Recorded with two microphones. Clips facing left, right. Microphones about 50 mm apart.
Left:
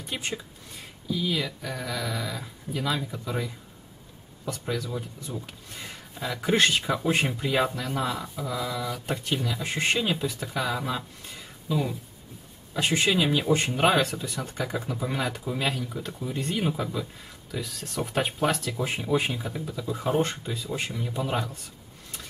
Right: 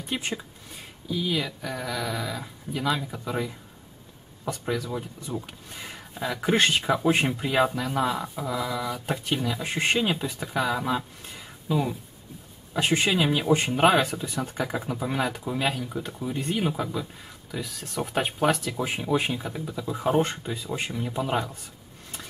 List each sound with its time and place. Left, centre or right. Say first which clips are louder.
0.0 s speech: right 2 dB; centre
3.3 s speech: right 3 dB; centre
4.8 s speech: right 2 dB; right
5.5 s speech: right 1 dB; centre
12.7 s speech: right 1 dB; centre